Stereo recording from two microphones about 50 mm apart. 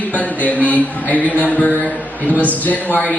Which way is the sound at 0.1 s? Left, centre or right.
Left.